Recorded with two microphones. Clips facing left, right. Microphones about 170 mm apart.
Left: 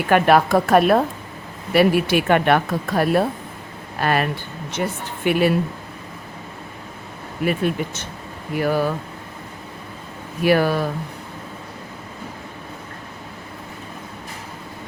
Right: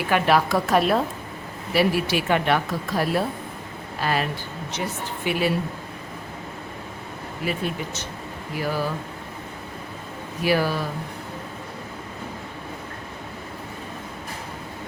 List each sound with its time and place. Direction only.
0.1 s speech: 55° left (ahead or behind)
7.4 s speech: 55° left (ahead or behind)
10.4 s speech: 55° left (ahead or behind)